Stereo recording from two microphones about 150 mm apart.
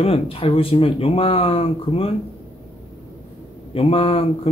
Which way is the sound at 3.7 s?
40° left (ahead or behind).